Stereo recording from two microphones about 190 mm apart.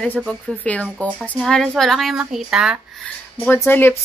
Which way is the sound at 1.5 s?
5° left (ahead or behind).